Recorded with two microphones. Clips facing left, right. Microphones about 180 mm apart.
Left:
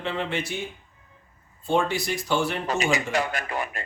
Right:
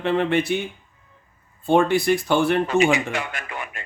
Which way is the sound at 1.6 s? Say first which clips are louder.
Right 7 dB; 55° right (ahead or behind).